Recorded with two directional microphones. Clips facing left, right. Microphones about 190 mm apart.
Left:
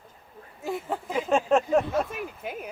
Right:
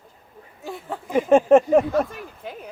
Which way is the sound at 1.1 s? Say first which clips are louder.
Right 9 dB; 55° right (ahead or behind).